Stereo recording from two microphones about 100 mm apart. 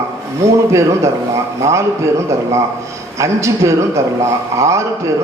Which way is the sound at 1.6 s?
30° right (ahead or behind).